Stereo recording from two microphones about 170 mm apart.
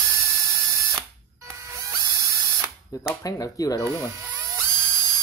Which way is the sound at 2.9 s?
20° left (ahead or behind).